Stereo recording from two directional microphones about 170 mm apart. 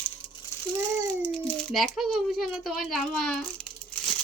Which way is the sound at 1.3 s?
Centre (ahead or behind).